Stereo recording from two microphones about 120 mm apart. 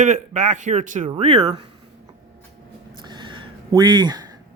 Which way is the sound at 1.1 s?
60° right (ahead or behind).